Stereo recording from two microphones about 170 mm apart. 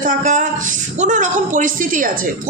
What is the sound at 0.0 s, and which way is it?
A woman's voice, 50° right (ahead or behind).